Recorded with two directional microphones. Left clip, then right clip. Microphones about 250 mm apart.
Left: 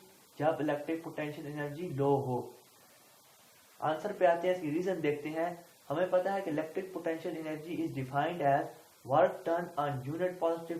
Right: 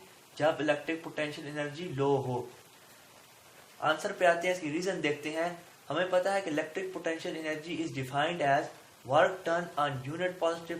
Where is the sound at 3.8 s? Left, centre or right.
Right.